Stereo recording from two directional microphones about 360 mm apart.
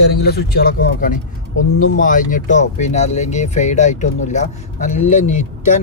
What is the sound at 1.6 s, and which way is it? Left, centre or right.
Speech, left.